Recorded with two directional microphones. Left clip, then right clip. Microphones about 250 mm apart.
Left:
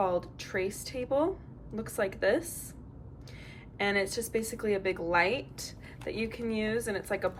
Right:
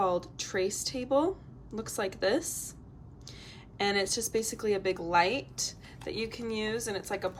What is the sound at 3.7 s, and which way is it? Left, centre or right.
A woman's voice, centre.